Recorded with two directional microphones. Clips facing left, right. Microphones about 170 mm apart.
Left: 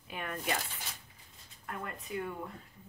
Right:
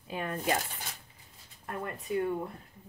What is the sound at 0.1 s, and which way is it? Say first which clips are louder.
Speech: right 5 dB; 30° right (ahead or behind).